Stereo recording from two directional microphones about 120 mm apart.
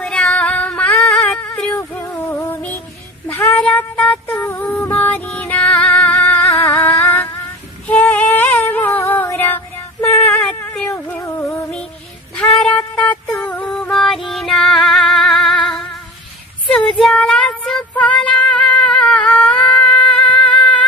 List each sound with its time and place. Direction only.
0.0 s female singing: 10° left (ahead or behind)
0.9 s a sound: 10° left (ahead or behind)
2.3 s music: 15° left (ahead or behind)
3.2 s child singing: 15° left (ahead or behind)
3.6 s a sound: 10° left (ahead or behind)
4.6 s music: 10° left (ahead or behind)
6.4 s a sound: 25° left (ahead or behind)
13.4 s music: 5° left (ahead or behind)
13.9 s female singing: centre (ahead or behind)
17.0 s child singing: 5° left (ahead or behind)